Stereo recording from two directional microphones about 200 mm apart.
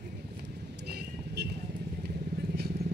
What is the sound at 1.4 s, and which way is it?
Vehicle, 55° right (ahead or behind).